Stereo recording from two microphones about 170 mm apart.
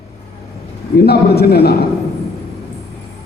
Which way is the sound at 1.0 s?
70° left (ahead or behind).